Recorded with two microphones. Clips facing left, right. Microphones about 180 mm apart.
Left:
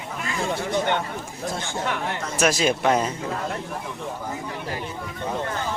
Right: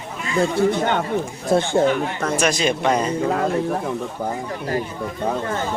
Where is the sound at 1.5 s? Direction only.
60° right (ahead or behind).